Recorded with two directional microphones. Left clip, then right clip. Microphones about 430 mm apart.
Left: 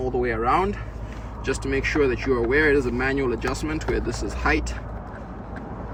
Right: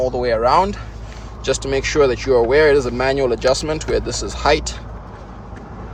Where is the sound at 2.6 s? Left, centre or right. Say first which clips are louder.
Right 6 dB; centre.